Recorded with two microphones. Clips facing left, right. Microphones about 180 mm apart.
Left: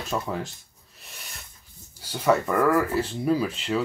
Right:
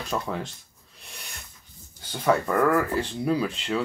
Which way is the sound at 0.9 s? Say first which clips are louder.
Right 1 dB; centre (ahead or behind).